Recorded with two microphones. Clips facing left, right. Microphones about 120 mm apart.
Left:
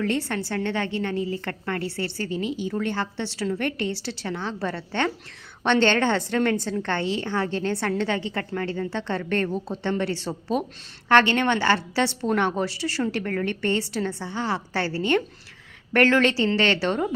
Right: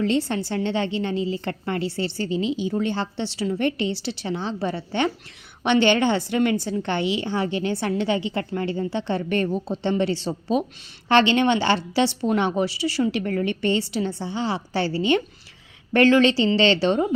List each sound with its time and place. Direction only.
0.0 s a woman's voice: 20° right (ahead or behind)